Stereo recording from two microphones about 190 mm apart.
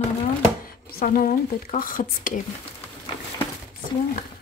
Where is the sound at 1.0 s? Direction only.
50° left (ahead or behind).